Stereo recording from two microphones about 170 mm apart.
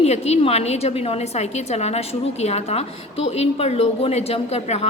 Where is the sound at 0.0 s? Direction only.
40° left (ahead or behind).